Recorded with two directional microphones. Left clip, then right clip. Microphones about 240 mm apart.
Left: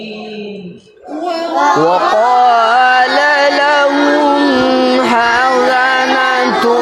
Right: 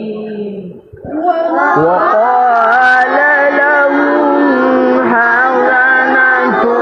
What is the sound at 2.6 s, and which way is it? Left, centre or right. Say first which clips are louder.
Music: right 1 dB; left.